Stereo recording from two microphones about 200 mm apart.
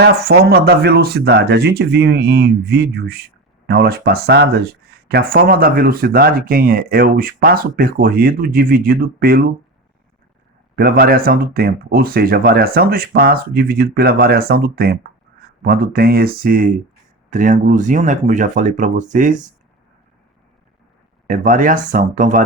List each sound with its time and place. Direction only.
0.0 s speech: 50° right (ahead or behind)
10.8 s speech: 50° right (ahead or behind)
21.2 s speech: 40° right (ahead or behind)